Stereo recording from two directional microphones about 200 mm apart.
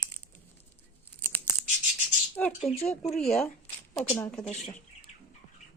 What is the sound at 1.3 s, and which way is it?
Scissors, 10° left (ahead or behind).